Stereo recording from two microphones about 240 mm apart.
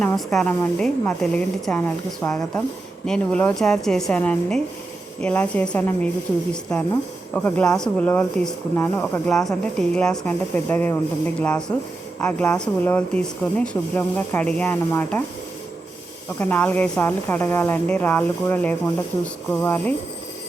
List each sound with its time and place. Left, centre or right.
0.0 s speech: centre
16.4 s speech: centre